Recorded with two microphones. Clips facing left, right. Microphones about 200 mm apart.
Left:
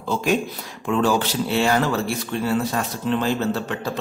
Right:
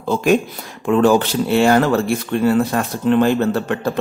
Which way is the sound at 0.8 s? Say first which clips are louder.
Right 6 dB; 55° right (ahead or behind).